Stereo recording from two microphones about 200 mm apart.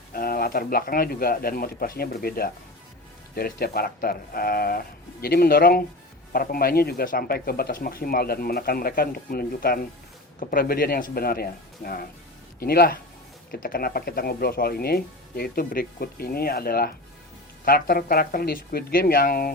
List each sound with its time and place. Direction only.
0.1 s speech: 45° left (ahead or behind)